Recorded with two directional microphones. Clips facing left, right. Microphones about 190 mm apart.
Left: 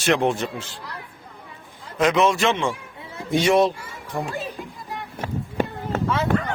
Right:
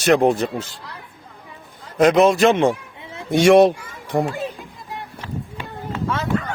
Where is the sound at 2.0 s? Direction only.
35° right (ahead or behind).